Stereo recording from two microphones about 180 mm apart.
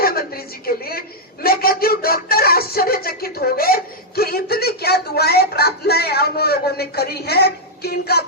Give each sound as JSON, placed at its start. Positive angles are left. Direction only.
{"t": 0.0, "sound": "a woman's voice", "side_deg": 55}